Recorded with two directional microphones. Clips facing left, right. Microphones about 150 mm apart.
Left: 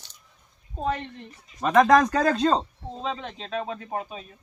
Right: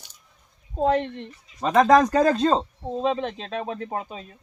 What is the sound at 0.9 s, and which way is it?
Speech, 70° right (ahead or behind).